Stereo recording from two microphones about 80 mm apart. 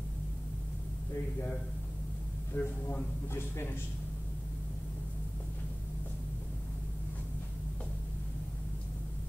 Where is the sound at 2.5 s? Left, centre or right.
Left.